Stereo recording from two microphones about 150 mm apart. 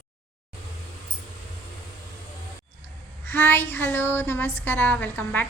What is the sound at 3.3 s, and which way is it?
Speech, 15° left (ahead or behind).